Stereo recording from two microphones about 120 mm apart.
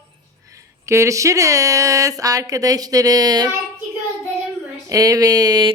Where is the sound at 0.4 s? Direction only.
25° right (ahead or behind).